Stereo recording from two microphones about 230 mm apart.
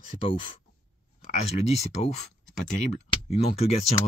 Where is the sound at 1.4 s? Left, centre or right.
Left.